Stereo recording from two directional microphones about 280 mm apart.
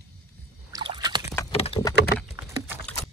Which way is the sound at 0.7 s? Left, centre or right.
Centre.